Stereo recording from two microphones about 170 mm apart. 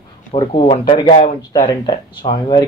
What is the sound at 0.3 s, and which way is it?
Speech, 35° left (ahead or behind).